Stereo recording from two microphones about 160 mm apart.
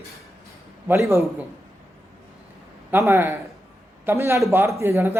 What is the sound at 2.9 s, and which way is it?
A man's voice, 15° right (ahead or behind).